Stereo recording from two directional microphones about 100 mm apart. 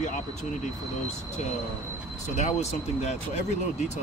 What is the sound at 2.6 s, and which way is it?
Speech, 90° left.